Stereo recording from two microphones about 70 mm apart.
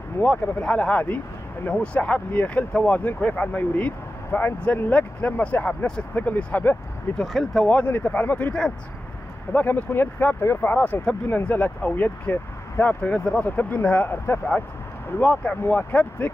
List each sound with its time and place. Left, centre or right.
0.2 s speech: centre
7.2 s speech: centre
7.8 s speech: left